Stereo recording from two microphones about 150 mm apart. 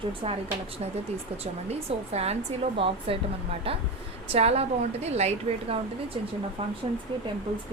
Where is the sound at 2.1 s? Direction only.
45° right (ahead or behind).